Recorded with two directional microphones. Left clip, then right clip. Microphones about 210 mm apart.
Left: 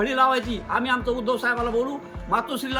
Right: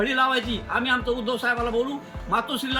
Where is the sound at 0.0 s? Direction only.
Centre (ahead or behind).